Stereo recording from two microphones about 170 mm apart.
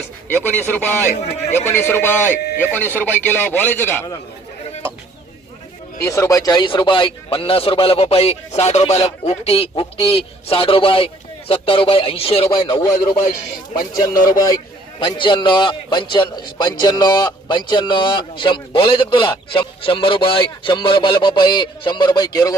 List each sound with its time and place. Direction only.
0.4 s a man's voice: 10° left (ahead or behind)
6.0 s speech: 15° left (ahead or behind)
13.9 s a man's voice: 20° left (ahead or behind)